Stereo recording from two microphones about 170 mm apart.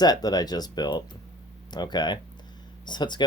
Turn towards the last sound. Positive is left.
turn(degrees=25)  # may be behind; listen again after turning